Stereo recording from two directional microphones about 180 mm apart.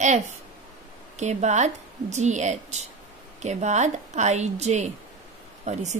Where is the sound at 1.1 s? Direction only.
40° right (ahead or behind).